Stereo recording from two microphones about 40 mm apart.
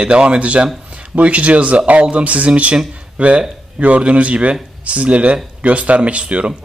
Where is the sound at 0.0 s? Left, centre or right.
Right.